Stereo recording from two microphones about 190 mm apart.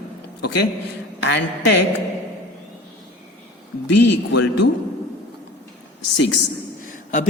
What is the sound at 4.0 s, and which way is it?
Speech, 65° left (ahead or behind).